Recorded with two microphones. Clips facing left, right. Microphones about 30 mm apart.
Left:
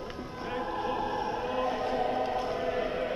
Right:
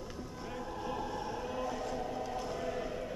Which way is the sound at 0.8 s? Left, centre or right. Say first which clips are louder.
Left 5 dB; left.